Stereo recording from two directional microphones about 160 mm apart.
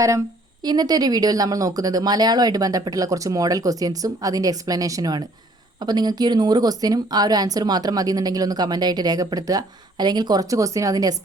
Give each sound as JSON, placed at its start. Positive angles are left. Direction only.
{"t": 0.6, "sound": "speech", "side_deg": -25}